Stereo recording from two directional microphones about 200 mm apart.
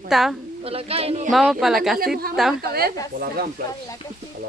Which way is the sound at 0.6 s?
30° right (ahead or behind).